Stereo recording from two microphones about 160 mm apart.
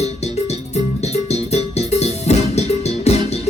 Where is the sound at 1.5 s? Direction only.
40° left (ahead or behind).